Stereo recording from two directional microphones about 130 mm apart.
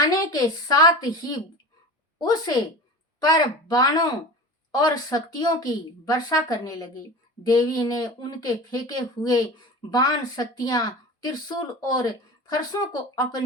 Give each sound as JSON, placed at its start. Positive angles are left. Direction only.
{"t": 0.0, "sound": "speech", "side_deg": 30}
{"t": 9.9, "sound": "speech", "side_deg": 30}